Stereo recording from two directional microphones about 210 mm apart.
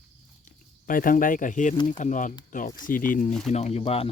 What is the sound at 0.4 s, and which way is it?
Speech, 40° left (ahead or behind).